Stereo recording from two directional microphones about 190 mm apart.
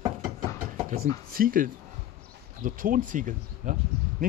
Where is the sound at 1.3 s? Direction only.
50° right (ahead or behind).